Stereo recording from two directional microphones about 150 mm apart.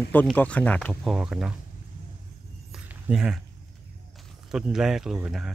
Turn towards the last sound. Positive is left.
turn(degrees=-5)  # may be behind; listen again after turning